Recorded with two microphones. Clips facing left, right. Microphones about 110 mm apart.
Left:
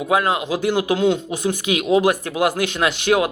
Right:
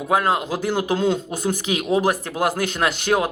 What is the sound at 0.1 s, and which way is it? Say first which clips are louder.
A man's voice: even; 40° right (ahead or behind).